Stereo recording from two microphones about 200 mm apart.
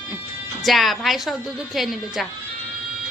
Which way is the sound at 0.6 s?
Centre (ahead or behind).